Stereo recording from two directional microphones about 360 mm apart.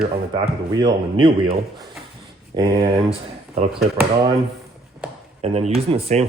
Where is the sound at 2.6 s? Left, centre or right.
Centre.